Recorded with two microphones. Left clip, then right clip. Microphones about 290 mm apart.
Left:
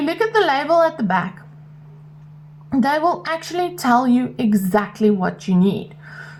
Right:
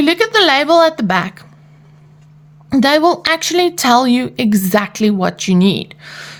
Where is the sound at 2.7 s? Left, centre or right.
Right.